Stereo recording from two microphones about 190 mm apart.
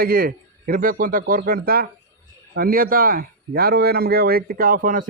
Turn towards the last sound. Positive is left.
turn(degrees=-45)  # may be behind; listen again after turning